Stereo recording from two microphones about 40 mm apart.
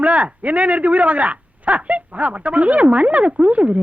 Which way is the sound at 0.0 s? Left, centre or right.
Right.